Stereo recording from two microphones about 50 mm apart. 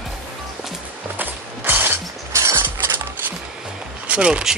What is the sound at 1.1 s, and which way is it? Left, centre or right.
Music, right.